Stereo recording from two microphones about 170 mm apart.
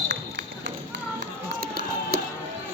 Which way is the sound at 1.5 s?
60° right (ahead or behind).